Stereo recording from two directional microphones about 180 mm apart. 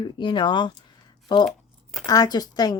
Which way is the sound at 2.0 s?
20° left (ahead or behind).